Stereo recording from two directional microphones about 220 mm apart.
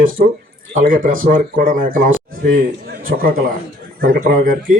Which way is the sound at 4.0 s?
40° right (ahead or behind).